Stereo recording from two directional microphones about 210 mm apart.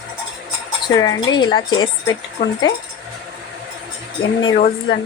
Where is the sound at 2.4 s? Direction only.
35° left (ahead or behind).